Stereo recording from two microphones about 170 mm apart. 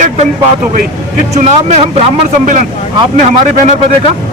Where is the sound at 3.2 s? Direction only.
45° right (ahead or behind).